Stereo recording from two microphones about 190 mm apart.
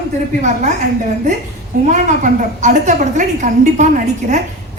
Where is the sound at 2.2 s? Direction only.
40° right (ahead or behind).